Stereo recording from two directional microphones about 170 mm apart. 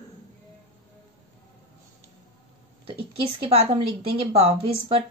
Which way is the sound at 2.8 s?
35° right (ahead or behind).